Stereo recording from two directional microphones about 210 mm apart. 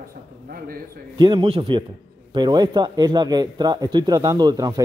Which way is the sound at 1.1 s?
20° right (ahead or behind).